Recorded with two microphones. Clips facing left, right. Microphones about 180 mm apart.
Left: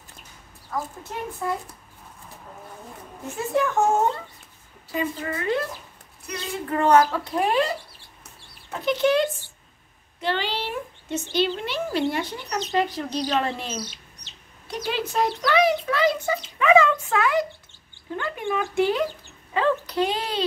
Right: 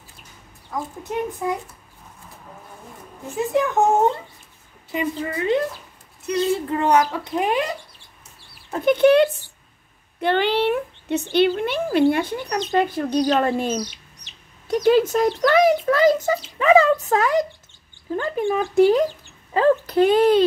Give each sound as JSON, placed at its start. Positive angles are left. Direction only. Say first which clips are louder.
{"t": 1.0, "sound": "a child's voice", "louder": "right 5 dB", "side_deg": -15}
{"t": 3.3, "sound": "a child's voice", "louder": "right 3 dB", "side_deg": -15}
{"t": 8.8, "sound": "a child's voice", "louder": "right 6 dB", "side_deg": -55}
{"t": 13.7, "sound": "chicken", "louder": "right 6 dB", "side_deg": -15}
{"t": 14.9, "sound": "a child's voice", "louder": "right 8 dB", "side_deg": -45}